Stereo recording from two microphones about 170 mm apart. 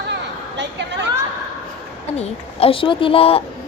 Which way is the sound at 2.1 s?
35° left (ahead or behind).